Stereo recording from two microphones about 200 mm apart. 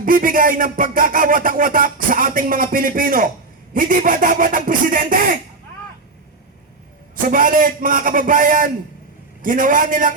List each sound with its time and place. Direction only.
0.0 s speech: 45° right (ahead or behind)
7.2 s speech: 45° right (ahead or behind)